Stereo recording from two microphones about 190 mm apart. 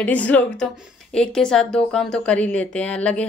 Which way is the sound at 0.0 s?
10° left (ahead or behind).